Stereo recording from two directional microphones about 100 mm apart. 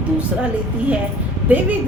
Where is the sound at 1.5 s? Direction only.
15° right (ahead or behind).